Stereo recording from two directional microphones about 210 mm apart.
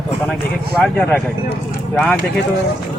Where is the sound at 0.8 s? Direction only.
5° left (ahead or behind).